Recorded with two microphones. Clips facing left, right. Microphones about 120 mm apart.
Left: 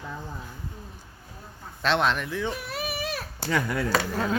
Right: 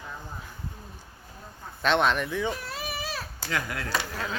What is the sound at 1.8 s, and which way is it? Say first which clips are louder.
Speech: right 1 dB; centre (ahead or behind).